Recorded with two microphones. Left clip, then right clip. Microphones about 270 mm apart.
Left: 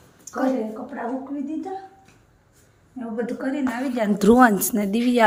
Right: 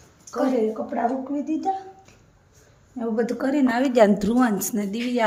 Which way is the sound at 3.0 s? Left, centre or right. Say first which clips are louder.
Right 4 dB; centre.